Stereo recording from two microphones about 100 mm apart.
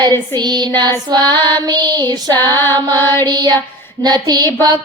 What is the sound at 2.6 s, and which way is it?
Music, 20° left (ahead or behind).